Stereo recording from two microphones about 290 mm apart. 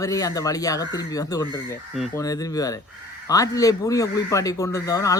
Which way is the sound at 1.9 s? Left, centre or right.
Centre.